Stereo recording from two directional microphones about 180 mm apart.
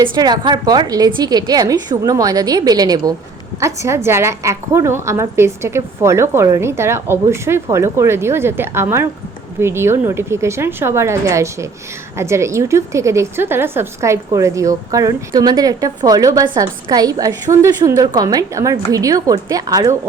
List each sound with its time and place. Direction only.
0.0 s a woman's voice: 25° right (ahead or behind)